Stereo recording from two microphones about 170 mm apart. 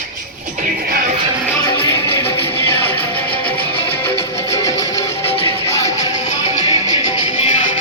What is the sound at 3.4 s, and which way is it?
Music, 30° left (ahead or behind).